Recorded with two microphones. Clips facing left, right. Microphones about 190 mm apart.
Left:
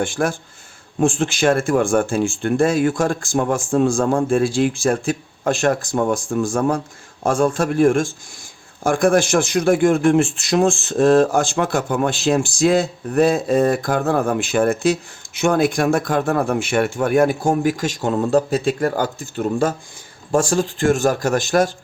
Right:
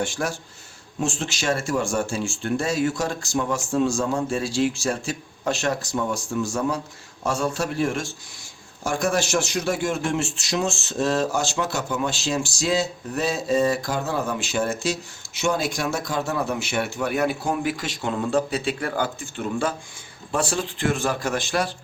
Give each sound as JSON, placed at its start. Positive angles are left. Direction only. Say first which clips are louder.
{"t": 0.0, "sound": "a man's voice", "louder": "left 6 dB", "side_deg": 55}